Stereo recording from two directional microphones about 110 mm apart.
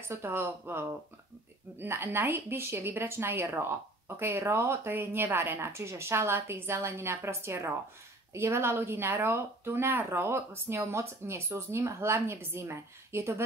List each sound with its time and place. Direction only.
0.1 s speech: 20° right (ahead or behind)